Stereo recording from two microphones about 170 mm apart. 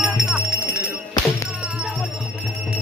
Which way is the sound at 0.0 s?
5° right (ahead or behind).